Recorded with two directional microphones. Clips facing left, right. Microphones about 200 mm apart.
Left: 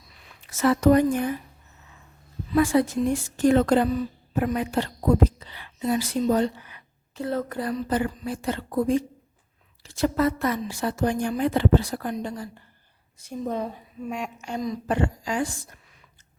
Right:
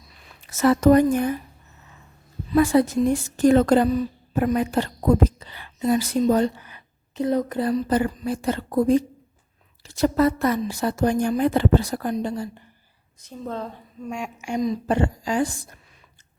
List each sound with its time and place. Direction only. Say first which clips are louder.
0.5 s a woman's voice: right 3 dB; 40° right (ahead or behind)
2.6 s a woman's voice: right 3 dB; 40° right (ahead or behind)
7.2 s speech: right 5 dB; 20° right (ahead or behind)
7.6 s speech: right 3 dB; 35° right (ahead or behind)
13.1 s a woman's voice: left 3 dB; 10° left (ahead or behind)
14.3 s speech: right 5 dB; 15° right (ahead or behind); by 15.4 s 35° right (ahead or behind)